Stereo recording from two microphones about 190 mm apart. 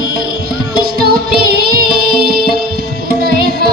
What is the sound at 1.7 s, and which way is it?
Music, 50° right (ahead or behind).